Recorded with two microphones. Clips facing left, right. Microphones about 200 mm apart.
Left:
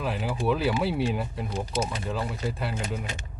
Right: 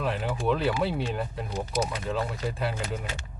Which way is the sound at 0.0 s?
Centre (ahead or behind).